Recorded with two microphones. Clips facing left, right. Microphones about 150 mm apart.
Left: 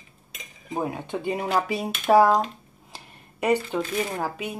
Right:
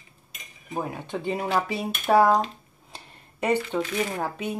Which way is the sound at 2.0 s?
5° left (ahead or behind).